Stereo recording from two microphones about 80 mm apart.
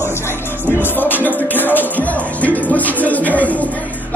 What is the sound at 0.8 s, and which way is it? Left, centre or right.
Music, left.